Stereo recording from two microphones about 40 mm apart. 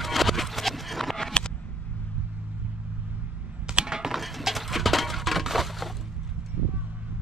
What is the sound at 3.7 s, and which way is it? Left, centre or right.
Typing, centre.